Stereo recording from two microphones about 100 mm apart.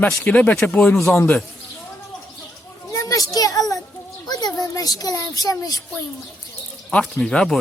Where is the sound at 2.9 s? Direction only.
35° left (ahead or behind).